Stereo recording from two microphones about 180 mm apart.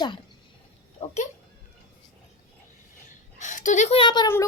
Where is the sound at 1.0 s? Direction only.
35° left (ahead or behind).